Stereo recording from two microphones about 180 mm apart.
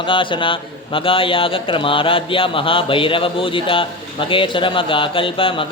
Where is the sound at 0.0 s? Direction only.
30° left (ahead or behind).